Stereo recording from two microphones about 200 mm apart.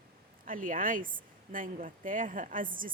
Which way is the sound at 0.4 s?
45° right (ahead or behind).